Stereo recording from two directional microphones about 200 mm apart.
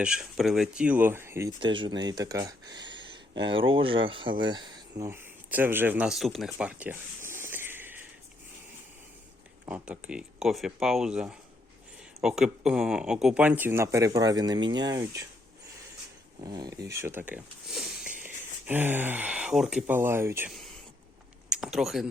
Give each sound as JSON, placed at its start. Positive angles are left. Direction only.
{"t": 0.0, "sound": "speech", "side_deg": -5}
{"t": 1.5, "sound": "speech", "side_deg": -25}
{"t": 9.6, "sound": "speech", "side_deg": -5}
{"t": 16.4, "sound": "speech", "side_deg": -20}
{"t": 21.5, "sound": "a sound", "side_deg": 0}